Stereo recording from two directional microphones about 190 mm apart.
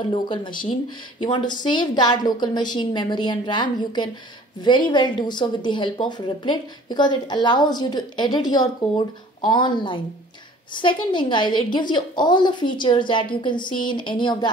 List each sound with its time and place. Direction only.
0.0 s a woman's voice: 25° left (ahead or behind)